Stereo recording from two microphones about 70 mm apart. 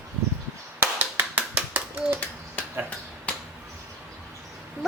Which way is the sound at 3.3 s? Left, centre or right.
Centre.